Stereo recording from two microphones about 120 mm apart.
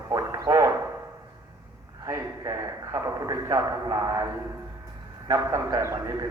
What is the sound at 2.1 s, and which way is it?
A man's voice, 25° right (ahead or behind).